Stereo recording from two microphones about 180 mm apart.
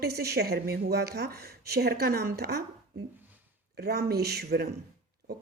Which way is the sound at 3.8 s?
60° right (ahead or behind).